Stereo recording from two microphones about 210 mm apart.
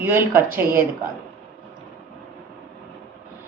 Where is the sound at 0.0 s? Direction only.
10° right (ahead or behind).